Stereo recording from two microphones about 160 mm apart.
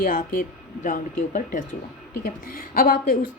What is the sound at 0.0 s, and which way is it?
A woman's voice, 60° left (ahead or behind).